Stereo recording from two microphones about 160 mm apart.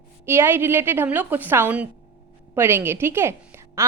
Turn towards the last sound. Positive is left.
turn(degrees=-15)  # may be behind; listen again after turning